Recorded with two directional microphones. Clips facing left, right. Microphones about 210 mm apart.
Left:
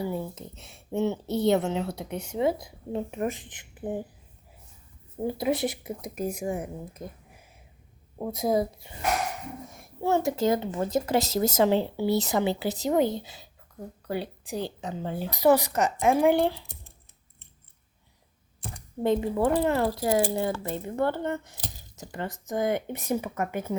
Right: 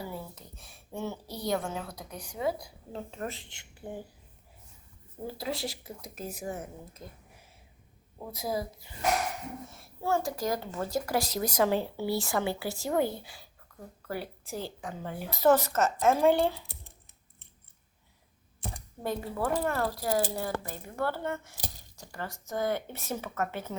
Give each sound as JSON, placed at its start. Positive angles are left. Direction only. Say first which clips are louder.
{"t": 0.1, "sound": "speech", "louder": "left 8 dB", "side_deg": 20}
{"t": 5.2, "sound": "speech", "louder": "left 8 dB", "side_deg": 20}
{"t": 7.0, "sound": "speech", "louder": "left 7 dB", "side_deg": 50}
{"t": 8.3, "sound": "speech", "louder": "left 8 dB", "side_deg": 25}
{"t": 13.7, "sound": "a sound", "louder": "left 7 dB", "side_deg": 20}
{"t": 14.1, "sound": "speech", "louder": "left 5 dB", "side_deg": 20}
{"t": 15.4, "sound": "speech", "louder": "left 2 dB", "side_deg": 15}
{"t": 19.0, "sound": "speech", "louder": "left 8 dB", "side_deg": 20}